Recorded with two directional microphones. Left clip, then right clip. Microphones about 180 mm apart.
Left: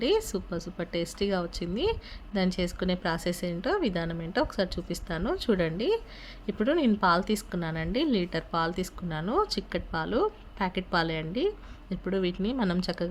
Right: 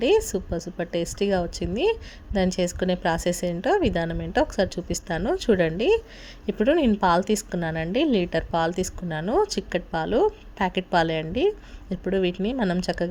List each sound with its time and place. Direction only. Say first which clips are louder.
0.0 s a woman's voice: right 6 dB; 15° right (ahead or behind)